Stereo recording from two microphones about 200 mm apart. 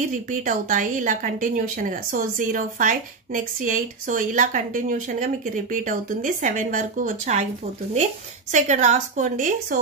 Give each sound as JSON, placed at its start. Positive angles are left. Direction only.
{"t": 0.0, "sound": "a woman's voice", "side_deg": -40}